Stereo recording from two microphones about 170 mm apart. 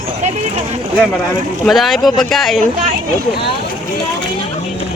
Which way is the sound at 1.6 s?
Centre (ahead or behind).